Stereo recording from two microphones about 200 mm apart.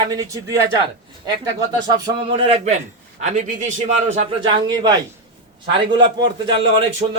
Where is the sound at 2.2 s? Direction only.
30° right (ahead or behind).